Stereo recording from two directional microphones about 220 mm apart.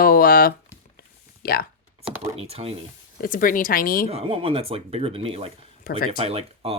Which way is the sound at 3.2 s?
40° left (ahead or behind).